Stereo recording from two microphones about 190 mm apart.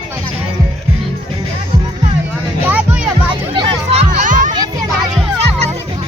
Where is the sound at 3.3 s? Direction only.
30° right (ahead or behind).